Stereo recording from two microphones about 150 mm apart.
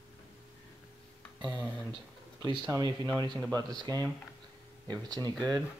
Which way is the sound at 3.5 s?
25° right (ahead or behind).